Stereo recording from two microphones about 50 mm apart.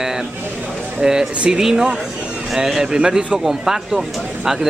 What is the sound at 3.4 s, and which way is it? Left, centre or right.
Speech, centre.